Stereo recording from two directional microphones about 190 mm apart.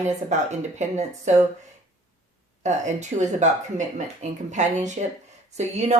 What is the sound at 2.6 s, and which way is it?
Speech, 40° right (ahead or behind).